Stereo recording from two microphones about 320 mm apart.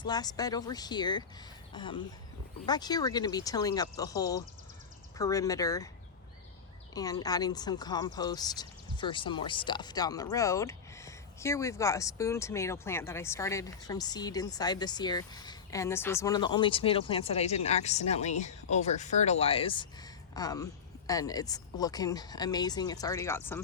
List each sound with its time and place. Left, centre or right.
0.0 s speech: centre
6.9 s speech: centre